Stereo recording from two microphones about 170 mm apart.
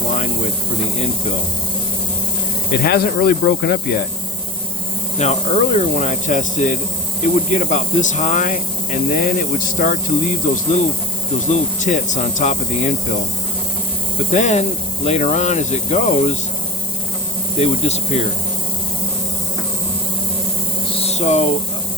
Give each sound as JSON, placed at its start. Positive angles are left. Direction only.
{"t": 2.8, "sound": "speech", "side_deg": 65}
{"t": 5.1, "sound": "speech", "side_deg": 40}
{"t": 11.8, "sound": "speech", "side_deg": 45}
{"t": 14.3, "sound": "speech", "side_deg": 40}
{"t": 17.6, "sound": "speech", "side_deg": 40}
{"t": 21.0, "sound": "a sound", "side_deg": 40}